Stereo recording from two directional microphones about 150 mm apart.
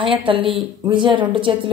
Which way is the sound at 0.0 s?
35° right (ahead or behind).